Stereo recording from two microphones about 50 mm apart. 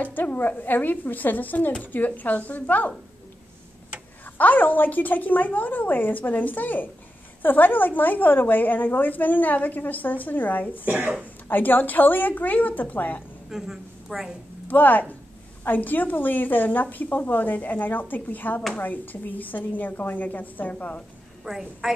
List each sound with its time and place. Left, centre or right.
0.0 s a woman's voice: left
4.4 s a woman's voice: left
13.5 s a woman's voice: centre
14.7 s a woman's voice: left
21.5 s a woman's voice: centre